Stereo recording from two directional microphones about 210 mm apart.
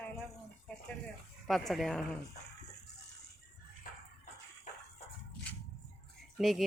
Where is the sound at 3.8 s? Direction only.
40° left (ahead or behind).